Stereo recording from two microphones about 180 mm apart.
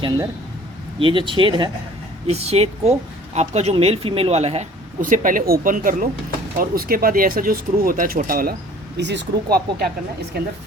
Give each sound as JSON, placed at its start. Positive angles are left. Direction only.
{"t": 0.9, "sound": "speech", "side_deg": -30}
{"t": 9.0, "sound": "speech", "side_deg": -75}